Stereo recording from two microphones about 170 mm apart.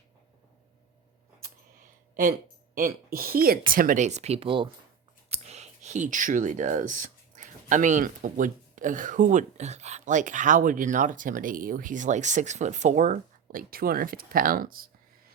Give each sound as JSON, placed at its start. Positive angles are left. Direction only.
{"t": 2.7, "sound": "speech", "side_deg": -55}